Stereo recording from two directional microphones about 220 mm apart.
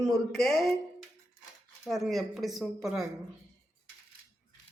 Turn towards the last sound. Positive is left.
turn(degrees=0)  # may be behind; listen again after turning